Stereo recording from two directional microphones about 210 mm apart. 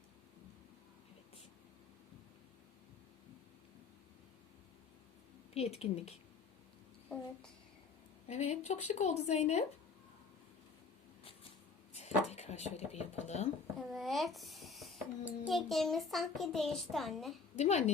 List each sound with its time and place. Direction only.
5.5 s speech: 30° left (ahead or behind)
8.3 s speech: 30° left (ahead or behind)
11.9 s speech: 30° left (ahead or behind)
13.7 s a child's voice: centre (ahead or behind)
17.6 s speech: 30° left (ahead or behind)